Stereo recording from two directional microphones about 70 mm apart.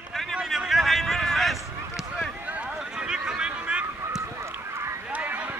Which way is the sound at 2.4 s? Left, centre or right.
Centre.